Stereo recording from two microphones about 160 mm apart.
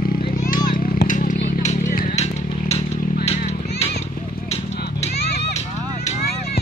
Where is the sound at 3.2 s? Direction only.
40° left (ahead or behind).